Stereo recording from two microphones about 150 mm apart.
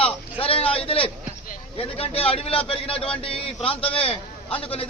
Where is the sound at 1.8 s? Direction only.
40° left (ahead or behind).